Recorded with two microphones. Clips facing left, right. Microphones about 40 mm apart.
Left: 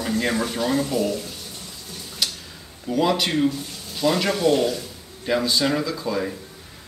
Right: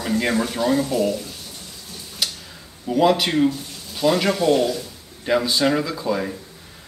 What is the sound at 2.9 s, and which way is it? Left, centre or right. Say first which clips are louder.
Speech: right 3 dB; centre.